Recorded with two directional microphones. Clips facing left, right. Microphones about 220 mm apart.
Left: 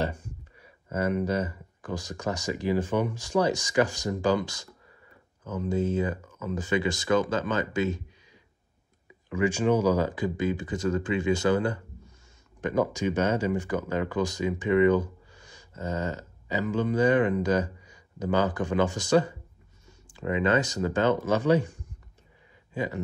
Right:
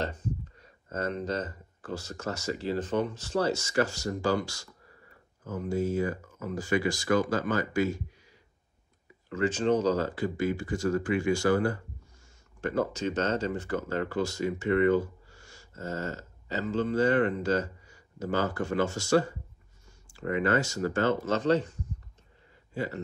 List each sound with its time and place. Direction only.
0.0 s speech: 10° left (ahead or behind)
9.3 s speech: 10° left (ahead or behind)
22.8 s speech: 15° left (ahead or behind)